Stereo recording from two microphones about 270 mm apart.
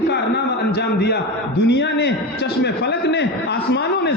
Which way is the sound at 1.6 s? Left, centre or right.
Left.